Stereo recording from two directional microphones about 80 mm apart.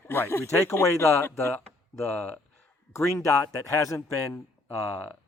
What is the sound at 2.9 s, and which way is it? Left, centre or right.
Speech, left.